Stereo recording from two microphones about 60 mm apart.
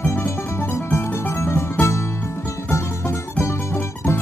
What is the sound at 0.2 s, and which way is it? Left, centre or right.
Music, left.